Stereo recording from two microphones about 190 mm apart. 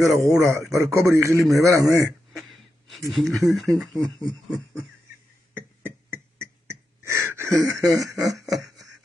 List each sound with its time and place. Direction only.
0.0 s speech: centre (ahead or behind)
0.3 s a man's voice: 15° right (ahead or behind)
3.1 s speech: centre (ahead or behind)
5.5 s beatboxing: 10° right (ahead or behind)
7.7 s speech: centre (ahead or behind)
8.0 s a man's voice: 20° right (ahead or behind)
8.4 s a sound: centre (ahead or behind)